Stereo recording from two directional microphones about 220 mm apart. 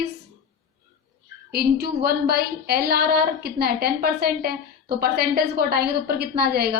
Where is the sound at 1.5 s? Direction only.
45° right (ahead or behind).